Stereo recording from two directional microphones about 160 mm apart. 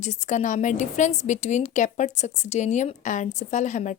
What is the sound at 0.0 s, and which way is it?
A woman's voice, 50° left (ahead or behind).